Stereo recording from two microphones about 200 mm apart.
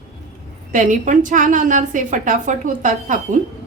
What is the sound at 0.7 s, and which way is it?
A woman's voice, 40° right (ahead or behind).